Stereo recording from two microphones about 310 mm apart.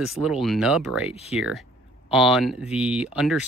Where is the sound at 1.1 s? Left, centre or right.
Centre.